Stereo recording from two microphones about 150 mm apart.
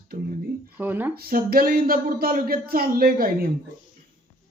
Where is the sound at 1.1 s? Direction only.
85° right.